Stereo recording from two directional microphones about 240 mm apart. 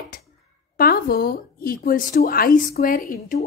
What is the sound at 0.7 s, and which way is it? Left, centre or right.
A woman's voice, left.